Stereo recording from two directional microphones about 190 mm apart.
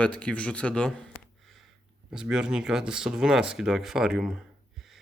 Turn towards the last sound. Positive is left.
turn(degrees=0)  # may be behind; listen again after turning